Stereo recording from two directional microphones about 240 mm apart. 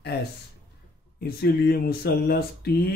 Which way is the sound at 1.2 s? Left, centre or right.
Left.